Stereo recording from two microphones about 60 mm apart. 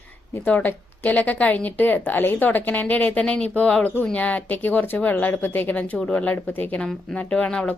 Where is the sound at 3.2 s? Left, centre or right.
Centre.